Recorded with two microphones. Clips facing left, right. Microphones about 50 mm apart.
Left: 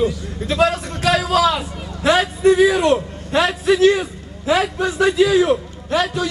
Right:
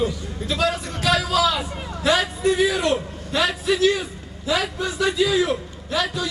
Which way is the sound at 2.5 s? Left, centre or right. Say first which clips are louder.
Left 7 dB; left.